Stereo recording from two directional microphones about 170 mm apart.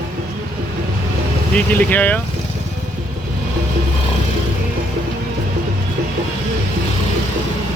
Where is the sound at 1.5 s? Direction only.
10° left (ahead or behind).